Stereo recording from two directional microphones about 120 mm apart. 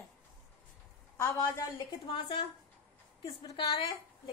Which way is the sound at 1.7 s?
40° left (ahead or behind).